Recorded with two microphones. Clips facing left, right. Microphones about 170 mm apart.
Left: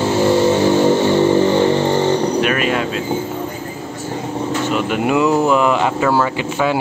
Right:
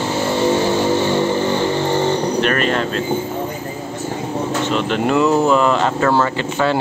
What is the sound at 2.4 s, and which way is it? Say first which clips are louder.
Air conditioning: even; 5° left (ahead or behind).